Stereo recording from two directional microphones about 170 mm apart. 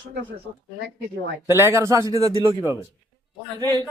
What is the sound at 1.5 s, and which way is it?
Speech, 15° right (ahead or behind).